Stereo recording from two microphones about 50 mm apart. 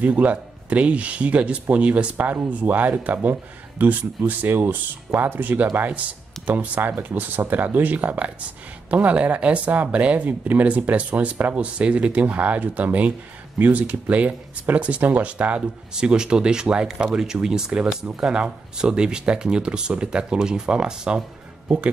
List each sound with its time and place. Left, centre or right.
0.0 s speech: right
2.3 s speech: right
15.9 s speech: centre